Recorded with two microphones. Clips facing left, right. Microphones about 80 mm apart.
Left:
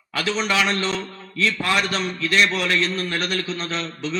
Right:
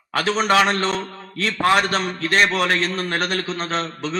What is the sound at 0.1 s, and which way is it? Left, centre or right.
A man's voice, right.